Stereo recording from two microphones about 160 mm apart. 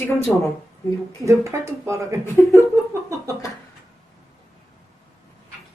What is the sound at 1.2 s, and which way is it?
Speech, 15° right (ahead or behind).